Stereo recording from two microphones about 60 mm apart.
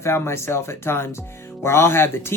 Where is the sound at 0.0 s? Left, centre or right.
Left.